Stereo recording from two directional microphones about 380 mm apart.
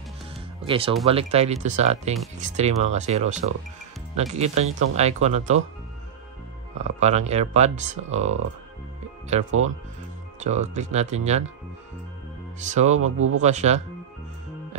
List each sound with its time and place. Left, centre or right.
0.6 s speech: centre
6.8 s speech: centre
9.5 s speech: right
10.4 s speech: centre
12.7 s speech: centre
13.0 s speech: right
13.4 s speech: centre